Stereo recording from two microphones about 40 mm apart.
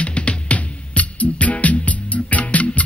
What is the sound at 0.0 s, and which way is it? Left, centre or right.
Music, left.